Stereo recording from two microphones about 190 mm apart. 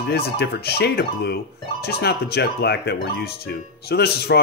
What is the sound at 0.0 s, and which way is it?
Speech, 55° left (ahead or behind).